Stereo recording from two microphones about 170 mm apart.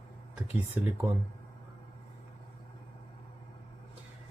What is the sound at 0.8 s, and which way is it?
Speech, 10° right (ahead or behind).